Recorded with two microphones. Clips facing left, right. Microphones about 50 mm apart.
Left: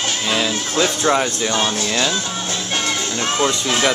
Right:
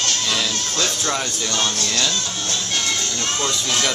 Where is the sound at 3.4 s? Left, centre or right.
Centre.